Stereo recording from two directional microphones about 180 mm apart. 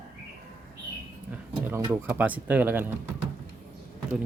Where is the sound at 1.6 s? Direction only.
10° right (ahead or behind).